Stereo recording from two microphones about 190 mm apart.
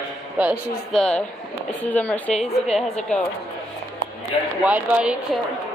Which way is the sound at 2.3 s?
35° left (ahead or behind).